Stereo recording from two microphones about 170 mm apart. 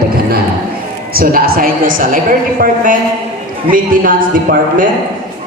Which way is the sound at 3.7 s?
55° right (ahead or behind).